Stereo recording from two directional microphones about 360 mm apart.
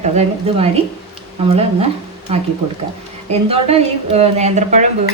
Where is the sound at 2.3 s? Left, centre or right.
Centre.